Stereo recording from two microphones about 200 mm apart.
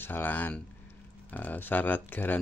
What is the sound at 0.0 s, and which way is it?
Speech, 10° left (ahead or behind).